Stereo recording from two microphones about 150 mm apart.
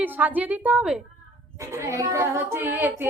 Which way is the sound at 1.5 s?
20° right (ahead or behind).